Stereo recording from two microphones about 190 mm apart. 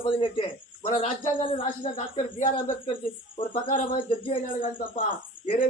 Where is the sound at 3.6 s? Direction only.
45° left (ahead or behind).